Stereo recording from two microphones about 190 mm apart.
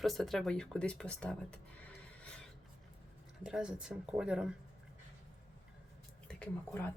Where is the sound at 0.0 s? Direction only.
Centre (ahead or behind).